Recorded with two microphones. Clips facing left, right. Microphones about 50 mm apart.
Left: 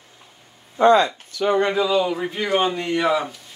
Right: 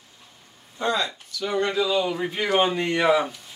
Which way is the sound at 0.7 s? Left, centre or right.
Left.